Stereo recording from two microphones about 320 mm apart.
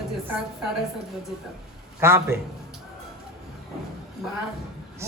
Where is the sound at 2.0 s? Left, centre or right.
Centre.